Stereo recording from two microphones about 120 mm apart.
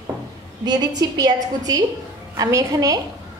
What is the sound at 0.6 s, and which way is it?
A woman's voice, 35° right (ahead or behind).